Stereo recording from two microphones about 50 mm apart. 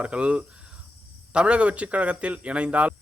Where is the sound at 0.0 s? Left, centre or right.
Right.